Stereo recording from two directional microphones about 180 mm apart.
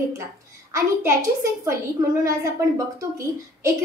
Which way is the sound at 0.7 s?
15° right (ahead or behind).